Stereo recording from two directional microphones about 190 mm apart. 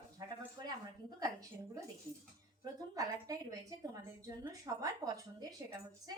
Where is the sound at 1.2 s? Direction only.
20° right (ahead or behind).